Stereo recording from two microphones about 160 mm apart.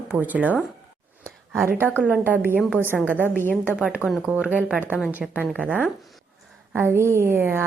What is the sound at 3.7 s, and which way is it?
A woman's voice, 5° right (ahead or behind).